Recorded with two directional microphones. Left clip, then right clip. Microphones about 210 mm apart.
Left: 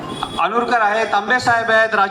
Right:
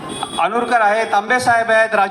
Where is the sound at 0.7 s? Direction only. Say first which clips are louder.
Right 1 dB; 35° right (ahead or behind).